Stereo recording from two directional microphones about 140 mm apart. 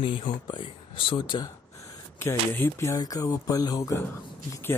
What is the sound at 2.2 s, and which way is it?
Speech, 15° left (ahead or behind).